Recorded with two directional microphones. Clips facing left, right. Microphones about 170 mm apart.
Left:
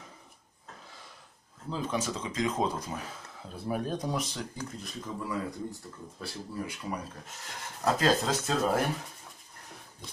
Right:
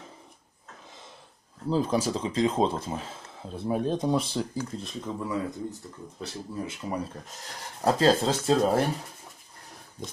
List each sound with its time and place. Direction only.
1.7 s a man's voice: 35° right (ahead or behind)